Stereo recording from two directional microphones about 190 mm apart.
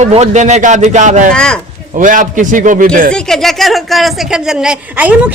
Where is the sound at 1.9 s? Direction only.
45° right (ahead or behind).